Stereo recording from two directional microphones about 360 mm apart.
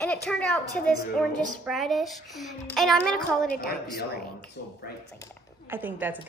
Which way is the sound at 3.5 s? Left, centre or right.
Left.